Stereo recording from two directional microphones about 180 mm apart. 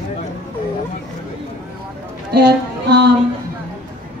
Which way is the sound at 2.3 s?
65° right (ahead or behind).